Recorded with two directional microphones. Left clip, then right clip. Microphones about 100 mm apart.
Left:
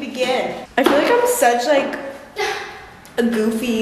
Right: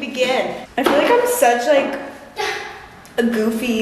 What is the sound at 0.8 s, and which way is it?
Speech, 20° left (ahead or behind).